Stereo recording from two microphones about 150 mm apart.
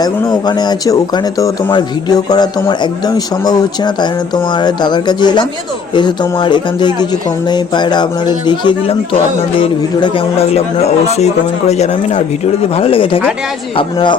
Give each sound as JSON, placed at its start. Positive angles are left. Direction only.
{"t": 0.0, "sound": "speech", "side_deg": 25}
{"t": 12.7, "sound": "speech", "side_deg": 35}